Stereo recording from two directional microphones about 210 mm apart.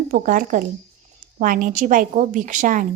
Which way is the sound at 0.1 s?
40° right (ahead or behind).